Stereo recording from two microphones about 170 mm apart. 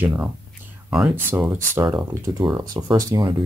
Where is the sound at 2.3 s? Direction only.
25° right (ahead or behind).